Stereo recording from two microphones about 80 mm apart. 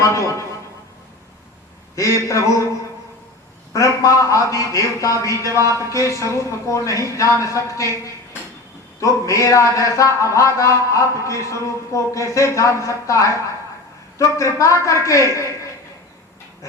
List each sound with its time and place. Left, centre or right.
0.0 s a man's voice: left
2.0 s a man's voice: left
3.7 s a man's voice: left